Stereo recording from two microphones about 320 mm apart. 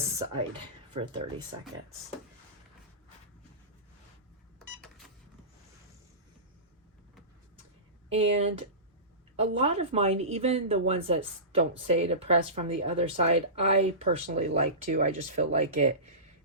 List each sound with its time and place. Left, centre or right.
0.9 s speech: centre
8.2 s speech: centre